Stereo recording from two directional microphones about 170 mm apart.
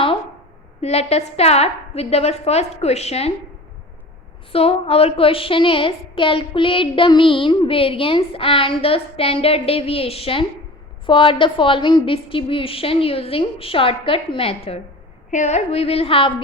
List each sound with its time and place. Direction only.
0.8 s a woman's voice: 40° left (ahead or behind)
4.5 s a woman's voice: 35° left (ahead or behind)